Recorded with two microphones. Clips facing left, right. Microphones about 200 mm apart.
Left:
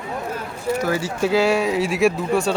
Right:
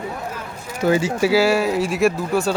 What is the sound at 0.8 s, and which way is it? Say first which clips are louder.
Speech: right 9 dB; 20° right (ahead or behind).